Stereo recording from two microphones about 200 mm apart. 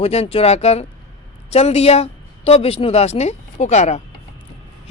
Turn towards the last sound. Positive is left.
turn(degrees=35)  # may be behind; listen again after turning